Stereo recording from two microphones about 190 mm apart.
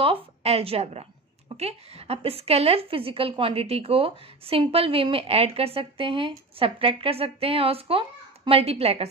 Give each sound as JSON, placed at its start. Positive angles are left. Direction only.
{"t": 0.0, "sound": "a woman's voice", "side_deg": -30}